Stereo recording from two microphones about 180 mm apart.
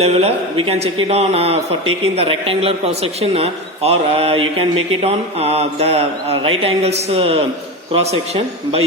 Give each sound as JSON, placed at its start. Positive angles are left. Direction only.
{"t": 0.0, "sound": "a man's voice", "side_deg": -35}